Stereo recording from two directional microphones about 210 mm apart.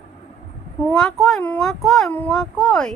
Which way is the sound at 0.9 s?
Centre (ahead or behind).